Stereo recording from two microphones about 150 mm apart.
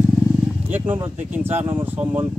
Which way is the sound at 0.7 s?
15° right (ahead or behind).